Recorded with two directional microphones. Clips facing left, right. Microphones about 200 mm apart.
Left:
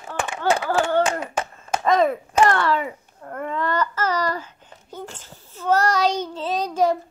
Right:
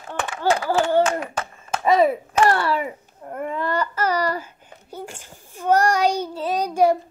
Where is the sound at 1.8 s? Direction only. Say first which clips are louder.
Right 2 dB; 10° right (ahead or behind).